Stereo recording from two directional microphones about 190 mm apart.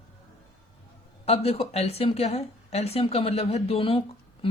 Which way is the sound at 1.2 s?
30° left (ahead or behind).